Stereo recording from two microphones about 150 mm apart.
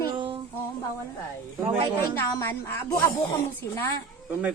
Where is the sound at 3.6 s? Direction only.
20° left (ahead or behind).